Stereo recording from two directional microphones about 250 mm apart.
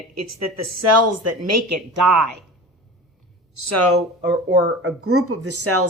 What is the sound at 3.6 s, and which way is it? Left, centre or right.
Speech, right.